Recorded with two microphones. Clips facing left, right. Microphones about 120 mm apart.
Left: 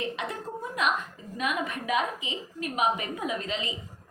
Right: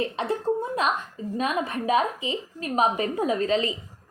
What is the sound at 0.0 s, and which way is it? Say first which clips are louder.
A woman's voice: right 7 dB; 30° right (ahead or behind).